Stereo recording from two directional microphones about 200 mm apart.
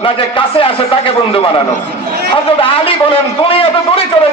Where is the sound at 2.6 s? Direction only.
25° left (ahead or behind).